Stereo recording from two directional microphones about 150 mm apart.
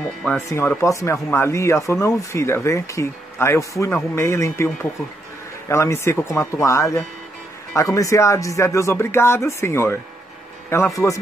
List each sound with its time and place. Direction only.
0.5 s speech: 15° left (ahead or behind)
5.7 s speech: 20° left (ahead or behind)